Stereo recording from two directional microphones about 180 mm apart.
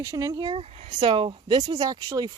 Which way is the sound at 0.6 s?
35° right (ahead or behind).